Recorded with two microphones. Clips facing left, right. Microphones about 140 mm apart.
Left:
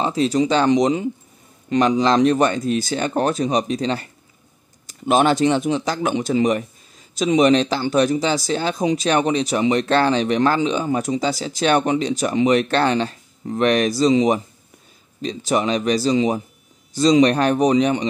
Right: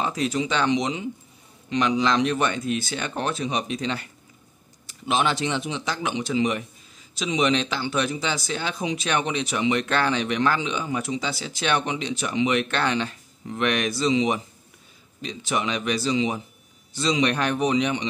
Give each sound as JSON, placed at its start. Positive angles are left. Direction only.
{"t": 0.0, "sound": "speech", "side_deg": 30}